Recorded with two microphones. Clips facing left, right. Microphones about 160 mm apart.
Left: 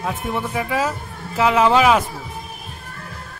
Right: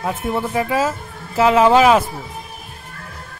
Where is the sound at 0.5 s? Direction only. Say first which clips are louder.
Right 3 dB; 40° right (ahead or behind).